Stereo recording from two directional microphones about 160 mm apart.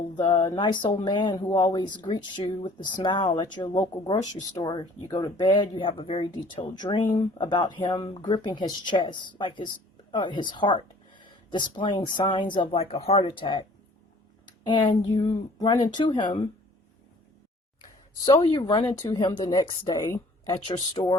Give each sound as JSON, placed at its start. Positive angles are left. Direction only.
{"t": 0.2, "sound": "speech", "side_deg": 30}
{"t": 14.4, "sound": "a sound", "side_deg": 30}
{"t": 15.3, "sound": "speech", "side_deg": 25}
{"t": 18.3, "sound": "speech", "side_deg": 25}